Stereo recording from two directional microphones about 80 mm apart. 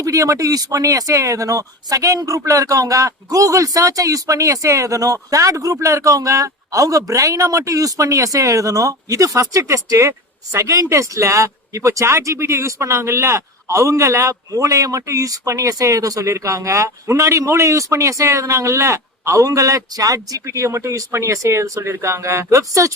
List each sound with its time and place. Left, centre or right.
0.0 s a man's voice: right